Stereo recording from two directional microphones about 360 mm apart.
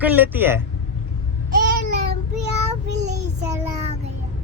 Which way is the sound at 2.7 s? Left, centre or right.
Right.